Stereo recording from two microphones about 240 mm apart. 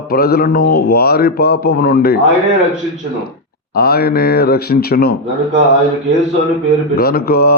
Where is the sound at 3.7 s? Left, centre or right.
Left.